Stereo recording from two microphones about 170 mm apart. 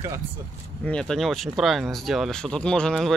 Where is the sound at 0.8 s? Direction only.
5° left (ahead or behind).